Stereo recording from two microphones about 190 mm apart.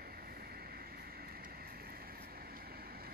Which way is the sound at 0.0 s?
50° right (ahead or behind).